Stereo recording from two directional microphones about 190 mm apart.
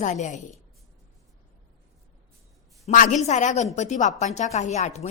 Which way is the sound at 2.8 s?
40° left (ahead or behind).